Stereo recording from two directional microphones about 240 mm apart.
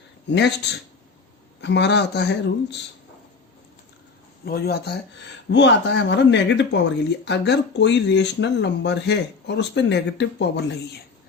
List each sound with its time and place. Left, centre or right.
0.3 s speech: left
1.6 s speech: left
4.4 s speech: left